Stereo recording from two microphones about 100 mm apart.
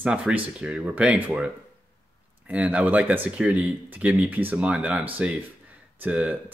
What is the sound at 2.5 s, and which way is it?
Speech, 15° right (ahead or behind).